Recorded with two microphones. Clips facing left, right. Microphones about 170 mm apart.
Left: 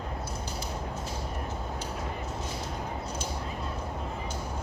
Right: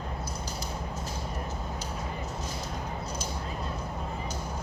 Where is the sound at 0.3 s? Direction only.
40° right (ahead or behind).